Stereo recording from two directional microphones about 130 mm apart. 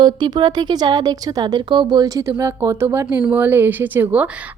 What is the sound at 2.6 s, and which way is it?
A woman's voice, 15° right (ahead or behind).